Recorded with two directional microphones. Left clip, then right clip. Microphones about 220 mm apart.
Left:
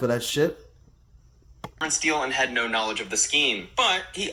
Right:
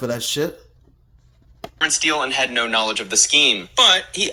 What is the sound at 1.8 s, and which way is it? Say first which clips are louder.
Speech: right 6 dB; 5° right (ahead or behind).